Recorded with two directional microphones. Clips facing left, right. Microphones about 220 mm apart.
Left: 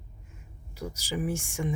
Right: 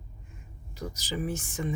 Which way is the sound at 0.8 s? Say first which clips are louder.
Left 1 dB; 10° left (ahead or behind).